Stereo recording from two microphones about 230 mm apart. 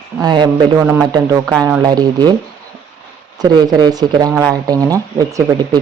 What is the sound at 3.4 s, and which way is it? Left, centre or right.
Speech, centre.